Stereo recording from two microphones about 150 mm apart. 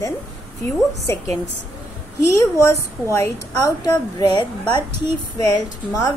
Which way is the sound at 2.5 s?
20° left (ahead or behind).